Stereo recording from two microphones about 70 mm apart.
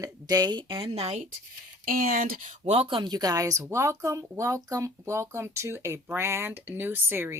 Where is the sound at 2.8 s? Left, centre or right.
Right.